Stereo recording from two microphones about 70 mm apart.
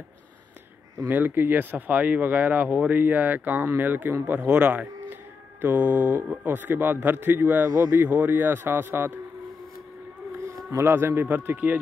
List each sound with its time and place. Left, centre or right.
1.0 s speech: right
4.4 s speech: centre
10.8 s speech: right